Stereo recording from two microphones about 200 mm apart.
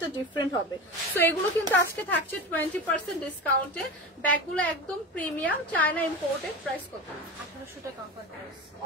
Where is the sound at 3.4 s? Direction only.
5° left (ahead or behind).